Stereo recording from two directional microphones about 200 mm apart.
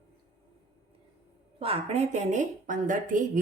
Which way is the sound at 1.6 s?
30° right (ahead or behind).